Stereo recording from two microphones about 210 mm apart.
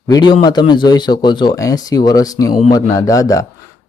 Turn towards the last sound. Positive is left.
turn(degrees=15)  # may be behind; listen again after turning